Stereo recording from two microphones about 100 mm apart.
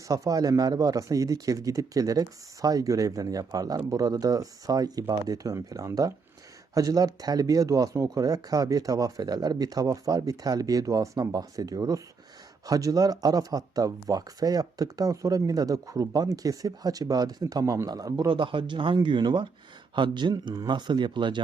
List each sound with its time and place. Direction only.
0.1 s speech: 35° right (ahead or behind)
18.3 s speech: 60° right (ahead or behind)